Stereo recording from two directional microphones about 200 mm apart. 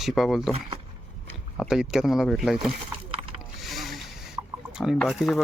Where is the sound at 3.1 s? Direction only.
25° right (ahead or behind).